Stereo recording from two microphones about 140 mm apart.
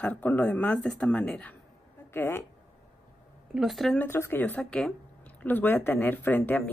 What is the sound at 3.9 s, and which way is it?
A man's voice, 15° left (ahead or behind).